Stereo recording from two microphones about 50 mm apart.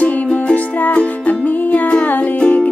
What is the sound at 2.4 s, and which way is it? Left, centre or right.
Music, left.